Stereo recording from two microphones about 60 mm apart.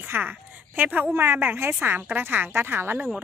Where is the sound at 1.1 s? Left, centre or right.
Right.